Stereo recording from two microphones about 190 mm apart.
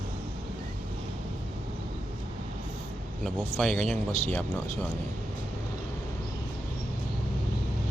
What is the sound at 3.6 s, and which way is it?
Speech, 5° left (ahead or behind).